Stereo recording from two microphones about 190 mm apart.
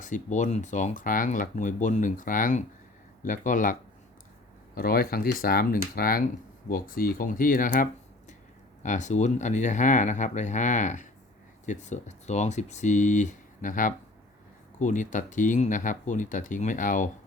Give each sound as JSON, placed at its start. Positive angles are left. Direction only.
{"t": 0.0, "sound": "speech", "side_deg": 40}